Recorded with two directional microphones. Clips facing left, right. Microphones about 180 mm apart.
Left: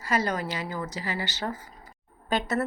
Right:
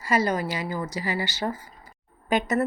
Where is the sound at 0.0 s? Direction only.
10° right (ahead or behind).